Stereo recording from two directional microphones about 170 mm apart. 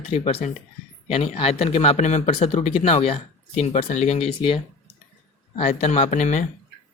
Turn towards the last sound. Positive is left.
turn(degrees=45)  # may be behind; listen again after turning